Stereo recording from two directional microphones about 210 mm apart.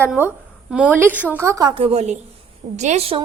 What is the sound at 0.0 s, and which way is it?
A woman's voice, 10° right (ahead or behind).